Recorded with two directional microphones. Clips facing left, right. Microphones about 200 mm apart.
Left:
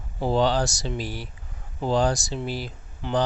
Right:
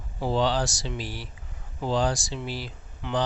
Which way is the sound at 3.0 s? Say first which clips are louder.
Left 3 dB; 40° left (ahead or behind).